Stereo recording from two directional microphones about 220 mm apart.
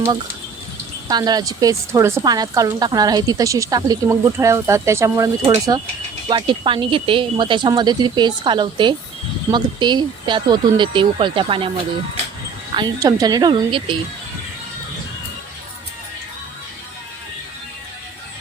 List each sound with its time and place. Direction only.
1.0 s a woman's voice: 15° right (ahead or behind)
12.7 s speech: 20° right (ahead or behind)